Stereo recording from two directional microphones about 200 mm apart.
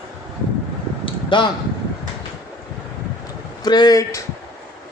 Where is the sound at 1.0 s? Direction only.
25° left (ahead or behind).